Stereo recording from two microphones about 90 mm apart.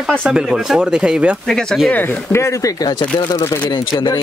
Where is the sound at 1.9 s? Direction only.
30° left (ahead or behind).